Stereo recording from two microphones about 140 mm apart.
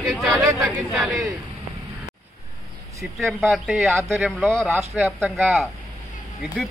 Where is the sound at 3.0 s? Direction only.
Centre (ahead or behind).